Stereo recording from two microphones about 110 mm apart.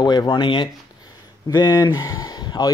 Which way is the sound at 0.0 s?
40° left (ahead or behind).